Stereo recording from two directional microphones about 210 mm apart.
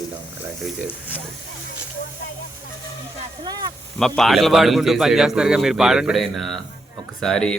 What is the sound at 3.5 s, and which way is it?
Speech, 20° right (ahead or behind).